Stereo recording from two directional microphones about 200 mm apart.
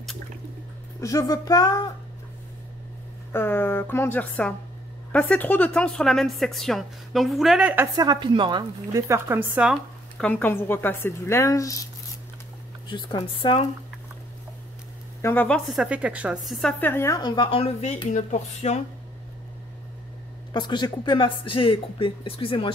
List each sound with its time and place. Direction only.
1.0 s speech: 15° left (ahead or behind)
3.3 s a woman's voice: 10° left (ahead or behind)
12.8 s speech: 25° left (ahead or behind)
15.2 s a woman's voice: 10° left (ahead or behind); by 18.8 s 35° left (ahead or behind)
20.5 s speech: 20° left (ahead or behind)